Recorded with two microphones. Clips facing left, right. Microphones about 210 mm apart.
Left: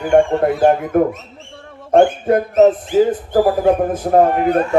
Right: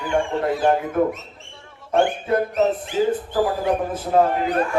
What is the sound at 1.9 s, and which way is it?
Speech, 50° left (ahead or behind).